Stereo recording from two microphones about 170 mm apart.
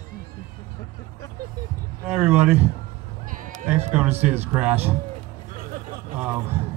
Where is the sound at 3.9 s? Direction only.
10° right (ahead or behind).